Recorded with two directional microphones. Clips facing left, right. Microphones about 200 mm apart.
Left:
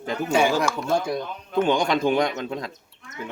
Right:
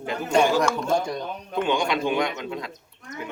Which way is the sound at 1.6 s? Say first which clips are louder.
Left 3 dB; 40° left (ahead or behind).